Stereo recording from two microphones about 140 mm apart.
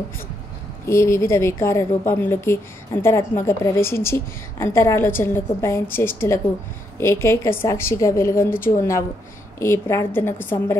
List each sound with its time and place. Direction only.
0.8 s a woman's voice: 20° left (ahead or behind)